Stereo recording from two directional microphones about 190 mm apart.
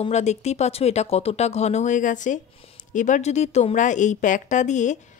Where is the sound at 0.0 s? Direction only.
35° left (ahead or behind).